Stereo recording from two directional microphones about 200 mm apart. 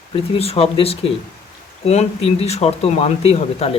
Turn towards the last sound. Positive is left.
turn(degrees=30)  # may be behind; listen again after turning